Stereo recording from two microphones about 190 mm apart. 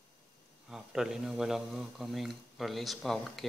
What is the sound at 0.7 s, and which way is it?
Speech, 5° right (ahead or behind).